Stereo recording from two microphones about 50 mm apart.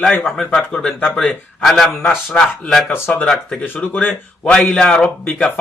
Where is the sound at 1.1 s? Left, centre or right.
Centre.